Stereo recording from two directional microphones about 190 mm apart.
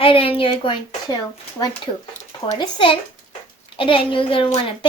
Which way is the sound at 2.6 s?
25° left (ahead or behind).